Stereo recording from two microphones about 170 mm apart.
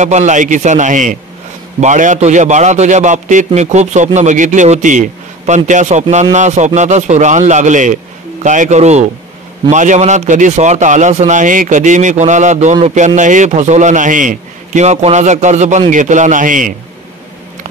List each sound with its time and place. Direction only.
0.0 s a man's voice: 45° right (ahead or behind)